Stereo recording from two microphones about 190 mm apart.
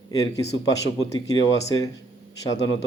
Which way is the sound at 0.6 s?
20° left (ahead or behind).